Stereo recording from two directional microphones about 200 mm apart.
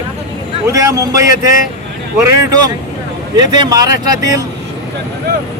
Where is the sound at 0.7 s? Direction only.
15° right (ahead or behind).